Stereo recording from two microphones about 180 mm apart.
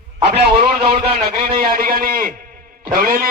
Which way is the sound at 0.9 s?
30° right (ahead or behind).